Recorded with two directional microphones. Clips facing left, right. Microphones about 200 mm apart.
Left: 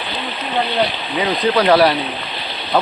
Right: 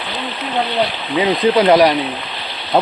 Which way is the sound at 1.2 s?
20° right (ahead or behind).